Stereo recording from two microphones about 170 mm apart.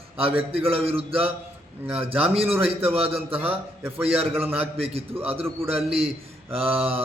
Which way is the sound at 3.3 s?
10° right (ahead or behind).